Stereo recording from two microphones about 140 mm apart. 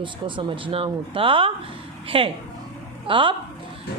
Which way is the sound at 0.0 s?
35° right (ahead or behind).